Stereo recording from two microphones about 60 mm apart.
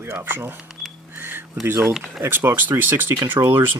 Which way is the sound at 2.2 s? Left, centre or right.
Right.